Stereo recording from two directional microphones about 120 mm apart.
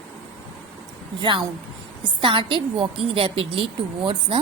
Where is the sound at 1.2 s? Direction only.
45° right (ahead or behind).